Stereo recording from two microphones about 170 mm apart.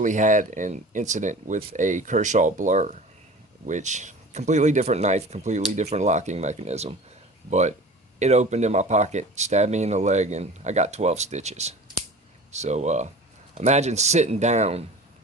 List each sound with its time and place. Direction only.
0.0 s speech: 50° right (ahead or behind)